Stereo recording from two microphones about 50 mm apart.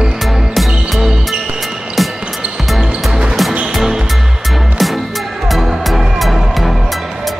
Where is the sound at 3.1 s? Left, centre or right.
Centre.